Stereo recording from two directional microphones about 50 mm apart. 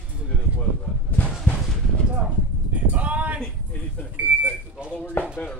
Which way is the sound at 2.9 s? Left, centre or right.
Right.